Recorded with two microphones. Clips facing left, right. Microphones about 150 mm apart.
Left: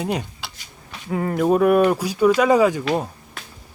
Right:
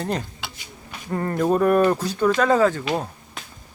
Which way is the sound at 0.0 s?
10° left (ahead or behind).